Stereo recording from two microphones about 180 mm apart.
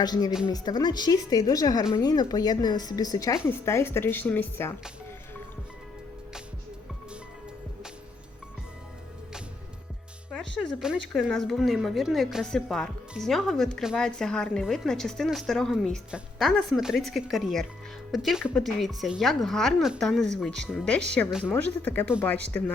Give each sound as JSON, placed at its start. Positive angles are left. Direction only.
{"t": 0.0, "sound": "speech", "side_deg": 20}
{"t": 0.3, "sound": "a woman's voice", "side_deg": -5}
{"t": 0.5, "sound": "speech", "side_deg": 25}
{"t": 10.8, "sound": "a woman's voice", "side_deg": -5}
{"t": 21.8, "sound": "speech", "side_deg": 10}